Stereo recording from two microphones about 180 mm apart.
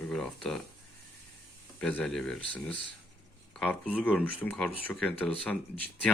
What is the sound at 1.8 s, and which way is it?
Speech, 5° left (ahead or behind).